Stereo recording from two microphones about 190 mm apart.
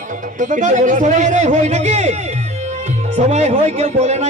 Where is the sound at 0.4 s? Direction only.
40° right (ahead or behind).